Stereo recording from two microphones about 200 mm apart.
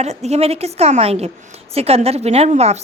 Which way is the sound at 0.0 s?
35° right (ahead or behind).